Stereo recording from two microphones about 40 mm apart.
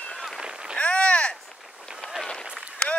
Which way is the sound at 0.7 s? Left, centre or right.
Left.